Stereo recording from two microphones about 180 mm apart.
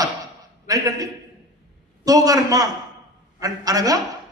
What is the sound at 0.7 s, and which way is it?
Speech, 20° right (ahead or behind).